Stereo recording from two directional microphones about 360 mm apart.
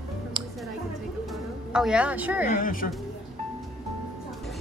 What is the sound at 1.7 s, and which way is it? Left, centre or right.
Speech, centre.